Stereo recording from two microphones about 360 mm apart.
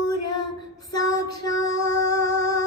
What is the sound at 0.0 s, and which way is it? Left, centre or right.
Female singing, left.